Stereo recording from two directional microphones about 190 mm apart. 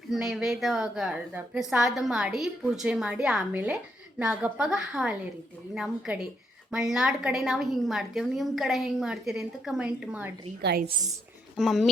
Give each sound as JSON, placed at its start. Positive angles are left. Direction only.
{"t": 0.1, "sound": "a woman's voice", "side_deg": 0}
{"t": 10.6, "sound": "a woman's voice", "side_deg": -60}
{"t": 11.5, "sound": "a woman's voice", "side_deg": 0}